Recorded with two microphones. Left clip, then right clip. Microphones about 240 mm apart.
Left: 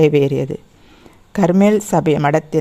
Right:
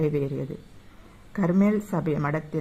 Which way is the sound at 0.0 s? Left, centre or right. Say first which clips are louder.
Left 14 dB; left.